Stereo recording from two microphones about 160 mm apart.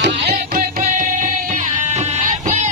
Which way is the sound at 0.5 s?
55° right (ahead or behind).